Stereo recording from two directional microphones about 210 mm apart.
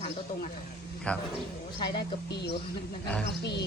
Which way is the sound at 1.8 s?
50° left (ahead or behind).